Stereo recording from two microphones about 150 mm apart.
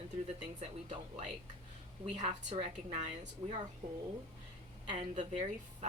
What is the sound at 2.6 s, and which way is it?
Speech, 50° right (ahead or behind).